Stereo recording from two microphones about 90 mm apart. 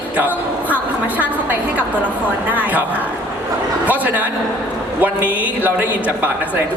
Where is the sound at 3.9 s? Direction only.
15° right (ahead or behind).